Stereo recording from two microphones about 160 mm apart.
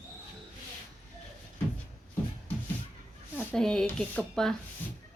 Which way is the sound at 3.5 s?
5° left (ahead or behind).